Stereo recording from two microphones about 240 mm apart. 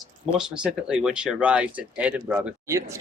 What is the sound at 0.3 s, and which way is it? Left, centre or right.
Speech, centre.